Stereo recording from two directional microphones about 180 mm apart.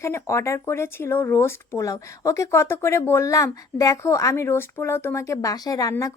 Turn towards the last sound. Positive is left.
turn(degrees=20)  # may be behind; listen again after turning